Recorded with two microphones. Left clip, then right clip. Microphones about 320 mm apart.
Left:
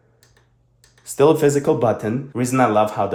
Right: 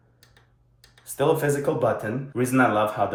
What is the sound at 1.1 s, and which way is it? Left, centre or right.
Speech, left.